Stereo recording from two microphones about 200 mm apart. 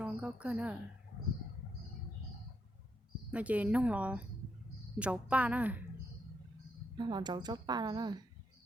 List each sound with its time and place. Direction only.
0.0 s a woman's voice: 5° right (ahead or behind)
3.3 s speech: 5° right (ahead or behind)
6.9 s a woman's voice: 20° right (ahead or behind)